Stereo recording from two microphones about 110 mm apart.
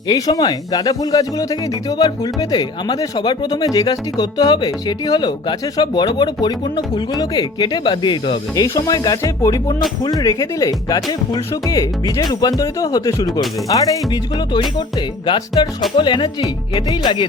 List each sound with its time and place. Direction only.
0.1 s speech: 35° left (ahead or behind)
8.6 s speech: 30° left (ahead or behind)
16.0 s music: 45° left (ahead or behind)